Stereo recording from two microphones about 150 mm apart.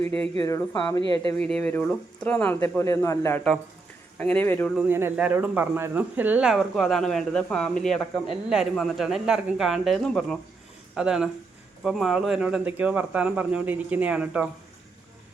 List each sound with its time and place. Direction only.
0.4 s speech: 20° left (ahead or behind)
1.5 s speech: 5° left (ahead or behind)
4.7 s speech: 10° right (ahead or behind)